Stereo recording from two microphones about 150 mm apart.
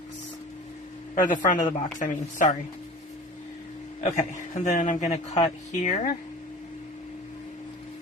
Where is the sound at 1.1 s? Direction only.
60° left (ahead or behind).